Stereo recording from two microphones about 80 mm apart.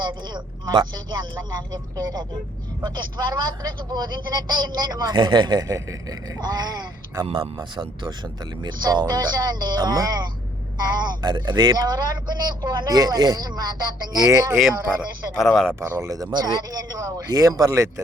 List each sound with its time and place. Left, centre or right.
0.0 s speech: right
6.4 s speech: right
8.6 s speech: right
14.3 s speech: right
15.4 s speech: centre
16.0 s speech: right
17.7 s speech: right